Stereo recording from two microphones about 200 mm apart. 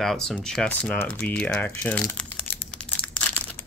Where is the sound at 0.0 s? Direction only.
Centre (ahead or behind).